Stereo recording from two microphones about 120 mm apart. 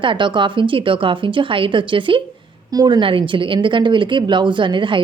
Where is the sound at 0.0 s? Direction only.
40° right (ahead or behind).